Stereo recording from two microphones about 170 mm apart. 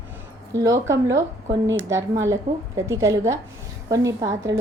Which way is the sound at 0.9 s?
15° right (ahead or behind).